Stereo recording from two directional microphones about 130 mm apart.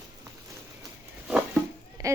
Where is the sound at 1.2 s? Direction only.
10° right (ahead or behind).